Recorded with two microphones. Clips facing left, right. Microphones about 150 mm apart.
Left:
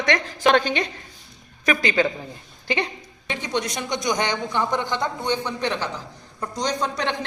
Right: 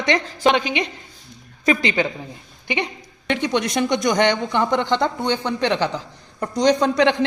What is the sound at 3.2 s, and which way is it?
A woman's voice, 65° right (ahead or behind).